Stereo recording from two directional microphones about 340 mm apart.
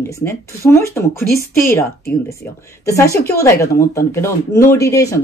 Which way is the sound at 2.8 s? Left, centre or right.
Centre.